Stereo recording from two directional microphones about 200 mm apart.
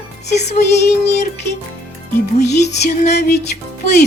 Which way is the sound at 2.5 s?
55° left (ahead or behind).